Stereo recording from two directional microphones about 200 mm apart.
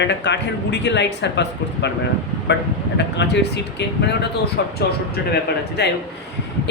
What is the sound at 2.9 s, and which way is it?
Speech, 60° left (ahead or behind).